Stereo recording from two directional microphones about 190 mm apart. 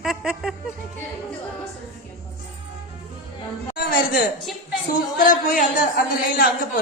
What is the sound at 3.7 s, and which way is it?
Music, 50° left (ahead or behind).